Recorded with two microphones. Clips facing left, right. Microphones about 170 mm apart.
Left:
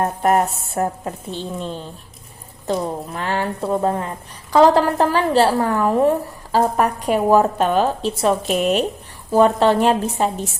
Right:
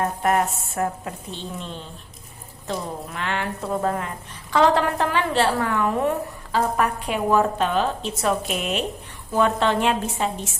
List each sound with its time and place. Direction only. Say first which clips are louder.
0.0 s a woman's voice: left 4 dB; 40° left (ahead or behind)
1.3 s a woman's voice: left 7 dB; centre (ahead or behind)
2.6 s a woman's voice: left 7 dB; 35° left (ahead or behind)
8.1 s a woman's voice: left 5 dB; 30° left (ahead or behind)